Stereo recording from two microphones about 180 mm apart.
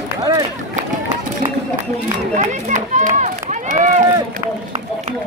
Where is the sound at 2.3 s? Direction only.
40° right (ahead or behind).